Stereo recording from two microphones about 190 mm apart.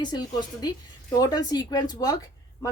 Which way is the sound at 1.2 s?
20° left (ahead or behind).